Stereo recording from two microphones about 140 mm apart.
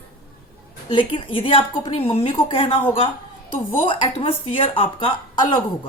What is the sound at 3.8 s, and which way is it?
A woman's voice, 40° left (ahead or behind).